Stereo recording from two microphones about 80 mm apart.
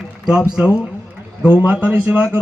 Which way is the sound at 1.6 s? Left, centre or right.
Centre.